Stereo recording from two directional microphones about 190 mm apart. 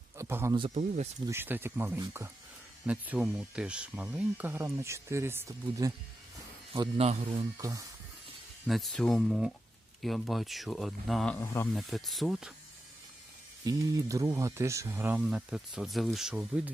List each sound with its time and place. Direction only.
0.2 s speech: 15° right (ahead or behind)
0.7 s a man's voice: 40° right (ahead or behind)
1.3 s speech: 10° right (ahead or behind)
6.7 s a man's voice: 30° right (ahead or behind)
7.6 s speech: 20° right (ahead or behind)
8.6 s speech: centre (ahead or behind)
11.3 s speech: 15° left (ahead or behind)
11.7 s speech: centre (ahead or behind)
13.7 s speech: 20° right (ahead or behind)